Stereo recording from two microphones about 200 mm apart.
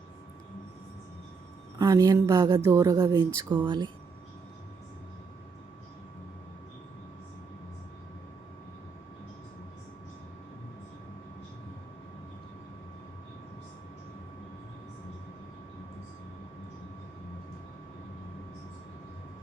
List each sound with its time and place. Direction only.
1.8 s speech: 15° right (ahead or behind)